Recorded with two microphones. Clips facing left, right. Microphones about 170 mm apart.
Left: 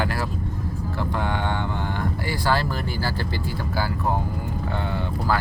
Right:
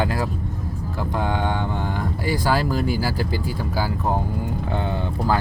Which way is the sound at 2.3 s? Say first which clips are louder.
Right 4 dB; 15° right (ahead or behind).